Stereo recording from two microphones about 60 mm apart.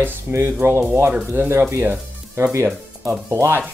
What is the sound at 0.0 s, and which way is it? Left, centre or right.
Speech, right.